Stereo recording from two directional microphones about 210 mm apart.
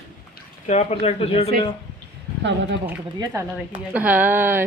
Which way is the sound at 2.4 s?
60° right (ahead or behind).